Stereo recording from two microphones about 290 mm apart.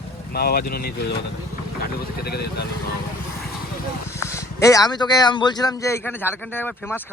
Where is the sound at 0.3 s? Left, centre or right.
Left.